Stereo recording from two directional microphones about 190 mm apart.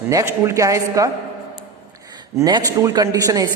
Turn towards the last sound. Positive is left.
turn(degrees=-20)  # may be behind; listen again after turning